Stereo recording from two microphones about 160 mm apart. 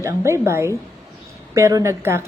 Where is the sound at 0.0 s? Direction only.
20° right (ahead or behind).